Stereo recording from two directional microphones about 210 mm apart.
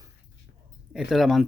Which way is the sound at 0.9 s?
5° right (ahead or behind).